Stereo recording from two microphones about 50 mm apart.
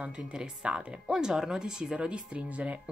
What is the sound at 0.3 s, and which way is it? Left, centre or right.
Speech, centre.